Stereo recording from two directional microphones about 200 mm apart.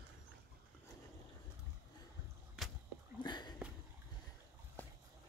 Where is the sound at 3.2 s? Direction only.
20° left (ahead or behind).